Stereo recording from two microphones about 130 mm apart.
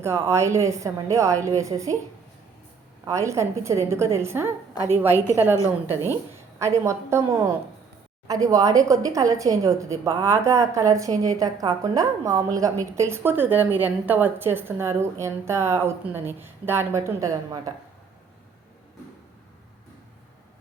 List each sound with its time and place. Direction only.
0.0 s a woman's voice: 20° right (ahead or behind)
3.0 s a woman's voice: 25° right (ahead or behind)
6.6 s a woman's voice: 20° right (ahead or behind)